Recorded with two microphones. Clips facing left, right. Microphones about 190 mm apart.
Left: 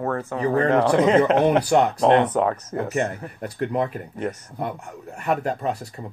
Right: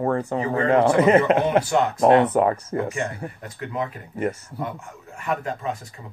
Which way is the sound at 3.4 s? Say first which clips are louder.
Left 7 dB; 50° left (ahead or behind).